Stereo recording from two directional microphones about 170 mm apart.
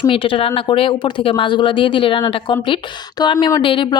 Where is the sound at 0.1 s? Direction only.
30° left (ahead or behind).